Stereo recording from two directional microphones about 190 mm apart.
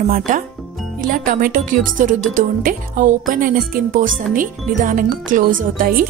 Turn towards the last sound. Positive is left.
turn(degrees=-45)  # may be behind; listen again after turning